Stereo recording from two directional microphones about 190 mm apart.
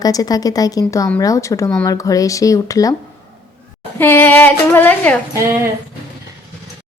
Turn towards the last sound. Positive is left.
turn(degrees=-15)  # may be behind; listen again after turning